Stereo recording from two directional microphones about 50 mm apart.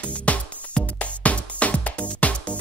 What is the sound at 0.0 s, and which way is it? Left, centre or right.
Music, left.